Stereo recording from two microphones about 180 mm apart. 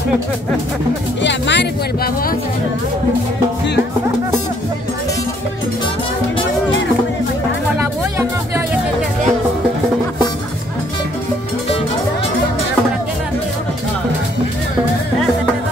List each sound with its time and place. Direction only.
1.2 s speech: 75° left (ahead or behind)
7.8 s music: 15° right (ahead or behind)